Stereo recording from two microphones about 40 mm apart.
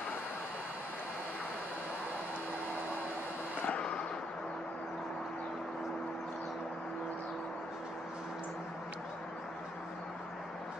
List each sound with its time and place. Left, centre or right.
3.6 s vehicle: left